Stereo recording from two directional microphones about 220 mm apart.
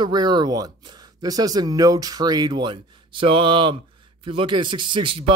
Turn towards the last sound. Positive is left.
turn(degrees=-20)  # may be behind; listen again after turning